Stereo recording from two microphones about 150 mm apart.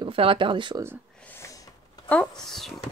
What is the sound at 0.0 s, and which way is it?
Speech, 35° right (ahead or behind).